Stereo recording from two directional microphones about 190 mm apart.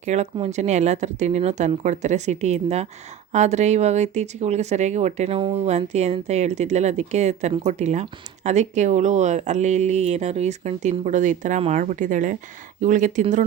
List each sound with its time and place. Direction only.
0.0 s speech: 35° right (ahead or behind)